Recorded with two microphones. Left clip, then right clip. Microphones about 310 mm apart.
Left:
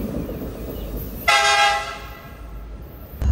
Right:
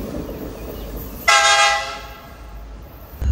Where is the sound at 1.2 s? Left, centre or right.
Right.